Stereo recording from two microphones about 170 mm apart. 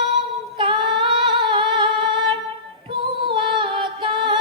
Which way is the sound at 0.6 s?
30° right (ahead or behind).